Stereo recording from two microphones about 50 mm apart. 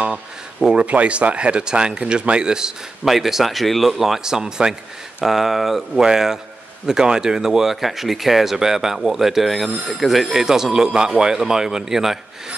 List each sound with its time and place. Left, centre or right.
0.8 s speech: right; by 12.2 s centre